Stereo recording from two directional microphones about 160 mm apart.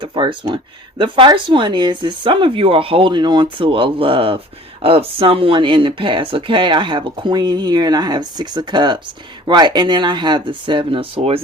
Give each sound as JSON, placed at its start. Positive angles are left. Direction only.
{"t": 0.0, "sound": "speech", "side_deg": -30}